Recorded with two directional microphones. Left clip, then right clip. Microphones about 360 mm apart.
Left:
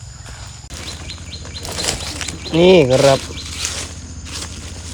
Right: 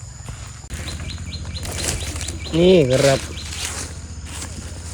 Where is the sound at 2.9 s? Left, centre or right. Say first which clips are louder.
Left 4 dB; centre.